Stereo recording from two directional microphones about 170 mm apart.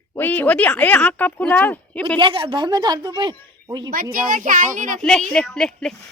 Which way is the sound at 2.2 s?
30° right (ahead or behind).